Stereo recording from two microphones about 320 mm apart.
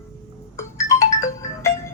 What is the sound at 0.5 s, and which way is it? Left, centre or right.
Music, centre.